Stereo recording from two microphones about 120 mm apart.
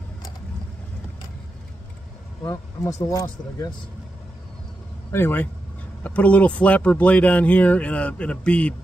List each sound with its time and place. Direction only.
2.4 s speech: 30° left (ahead or behind)
5.1 s speech: 15° left (ahead or behind)